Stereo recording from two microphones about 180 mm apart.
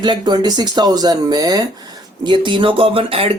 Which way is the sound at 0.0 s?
25° right (ahead or behind).